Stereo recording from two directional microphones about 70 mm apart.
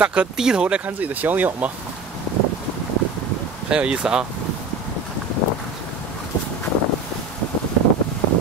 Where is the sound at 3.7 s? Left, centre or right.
Centre.